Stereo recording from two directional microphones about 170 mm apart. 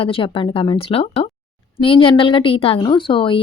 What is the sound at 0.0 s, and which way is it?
A woman's voice, 30° left (ahead or behind).